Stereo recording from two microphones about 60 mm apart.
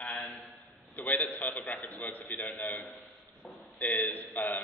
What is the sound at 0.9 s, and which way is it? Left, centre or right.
A man's voice, left.